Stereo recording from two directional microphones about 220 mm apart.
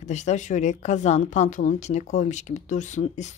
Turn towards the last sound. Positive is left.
turn(degrees=30)  # may be behind; listen again after turning